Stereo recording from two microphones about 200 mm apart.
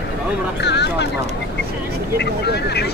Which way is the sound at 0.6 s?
60° left (ahead or behind).